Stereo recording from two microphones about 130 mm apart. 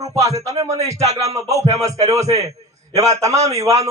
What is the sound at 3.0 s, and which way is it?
Speech, 25° right (ahead or behind).